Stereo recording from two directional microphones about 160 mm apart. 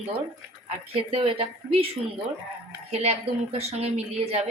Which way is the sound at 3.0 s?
40° right (ahead or behind).